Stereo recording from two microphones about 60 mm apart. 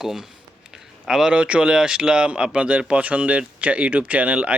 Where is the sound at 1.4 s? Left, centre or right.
Right.